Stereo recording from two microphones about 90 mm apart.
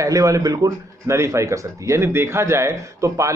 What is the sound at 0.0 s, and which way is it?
Speech, 35° right (ahead or behind).